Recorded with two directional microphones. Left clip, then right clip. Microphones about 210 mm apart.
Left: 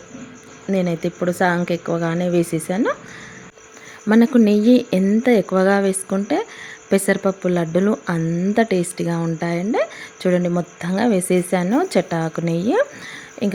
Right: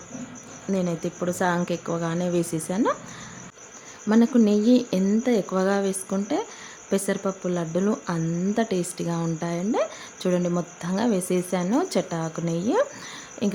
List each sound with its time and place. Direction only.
0.7 s a woman's voice: 15° left (ahead or behind)
4.1 s a woman's voice: 20° left (ahead or behind)